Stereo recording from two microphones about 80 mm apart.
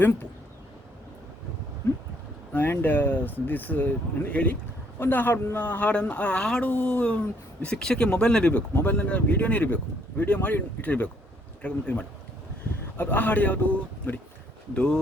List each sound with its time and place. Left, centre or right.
2.5 s speech: left